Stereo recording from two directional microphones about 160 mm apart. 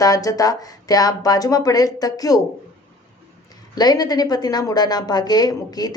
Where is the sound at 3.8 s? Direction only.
25° left (ahead or behind).